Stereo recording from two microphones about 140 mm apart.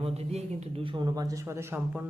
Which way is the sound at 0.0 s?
45° right (ahead or behind).